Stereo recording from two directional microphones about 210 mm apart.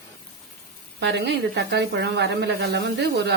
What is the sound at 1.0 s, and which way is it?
Speech, 55° right (ahead or behind).